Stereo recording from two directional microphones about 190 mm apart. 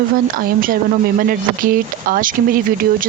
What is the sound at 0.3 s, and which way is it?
Speech, 50° right (ahead or behind).